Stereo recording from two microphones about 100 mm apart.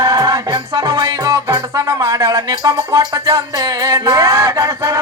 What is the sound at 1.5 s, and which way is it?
Speech, 35° right (ahead or behind).